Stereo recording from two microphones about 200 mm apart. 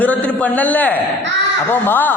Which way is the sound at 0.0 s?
5° left (ahead or behind).